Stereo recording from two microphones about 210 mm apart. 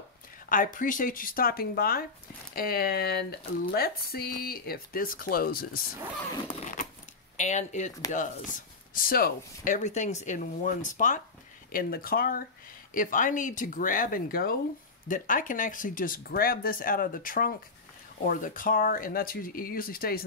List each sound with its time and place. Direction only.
0.5 s speech: 40° left (ahead or behind)
6.6 s a sound: 40° left (ahead or behind)
7.3 s speech: 35° left (ahead or behind)